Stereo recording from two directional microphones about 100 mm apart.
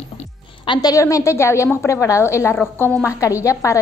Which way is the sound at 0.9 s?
30° left (ahead or behind).